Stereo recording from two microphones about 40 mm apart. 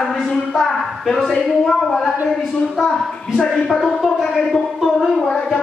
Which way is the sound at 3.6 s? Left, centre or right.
Centre.